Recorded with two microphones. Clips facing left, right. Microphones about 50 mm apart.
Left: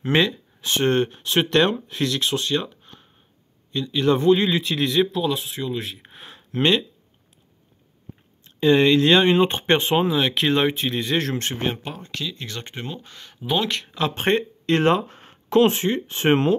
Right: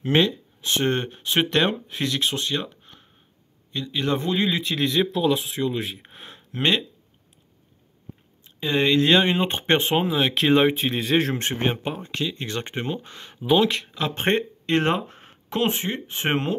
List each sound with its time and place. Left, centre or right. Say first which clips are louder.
0.0 s speech: even; centre
0.8 s speech: left 7 dB; centre
1.9 s speech: left 2 dB; right
4.0 s speech: left 5 dB; right
4.3 s speech: left 6 dB; left
4.7 s speech: even; centre
8.5 s speech: left 4 dB; centre
9.5 s speech: left 1 dB; right
9.9 s speech: left 2 dB; centre; by 13.4 s right
13.4 s speech: right 4 dB; centre
14.1 s speech: even; right
15.0 s speech: left 3 dB; centre